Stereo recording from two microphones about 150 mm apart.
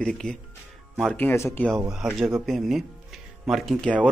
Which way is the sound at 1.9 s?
5° right (ahead or behind).